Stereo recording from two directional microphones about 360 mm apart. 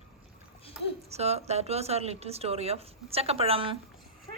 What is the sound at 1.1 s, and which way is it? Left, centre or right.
A woman's voice, centre.